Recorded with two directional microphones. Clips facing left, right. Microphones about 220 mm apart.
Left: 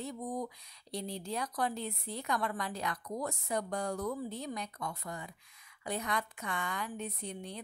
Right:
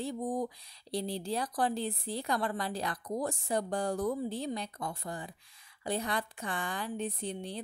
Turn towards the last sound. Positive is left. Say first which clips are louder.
# right 4 dB
turn(degrees=-30)  # may be behind; listen again after turning